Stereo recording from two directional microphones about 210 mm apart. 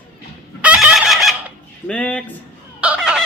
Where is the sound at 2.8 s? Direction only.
5° right (ahead or behind).